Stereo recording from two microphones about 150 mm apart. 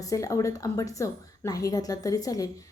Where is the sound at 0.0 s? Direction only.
20° left (ahead or behind).